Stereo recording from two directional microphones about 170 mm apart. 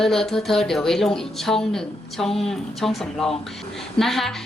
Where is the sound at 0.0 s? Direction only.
Centre (ahead or behind).